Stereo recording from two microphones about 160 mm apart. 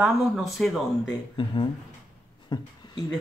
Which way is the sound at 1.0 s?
30° left (ahead or behind).